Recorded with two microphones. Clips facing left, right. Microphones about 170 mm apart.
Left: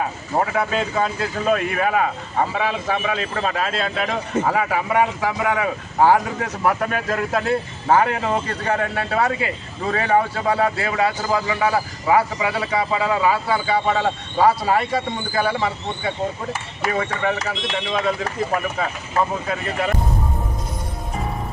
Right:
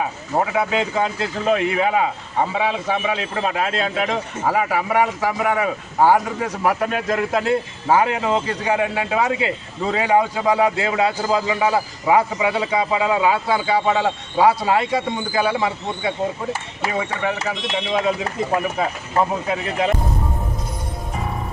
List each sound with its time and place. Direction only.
0.3 s speech: 15° right (ahead or behind)
17.9 s speech: 20° right (ahead or behind)